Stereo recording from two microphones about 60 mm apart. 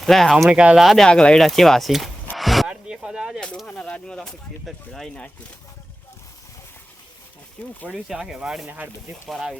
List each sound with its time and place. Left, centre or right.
0.0 s speech: centre
0.5 s speech: centre
0.8 s speech: centre
1.0 s speech: centre
2.3 s a sound: centre
2.6 s artillery fire: centre
3.7 s speech: centre
7.6 s speech: left
8.0 s speech: centre
8.6 s speech: right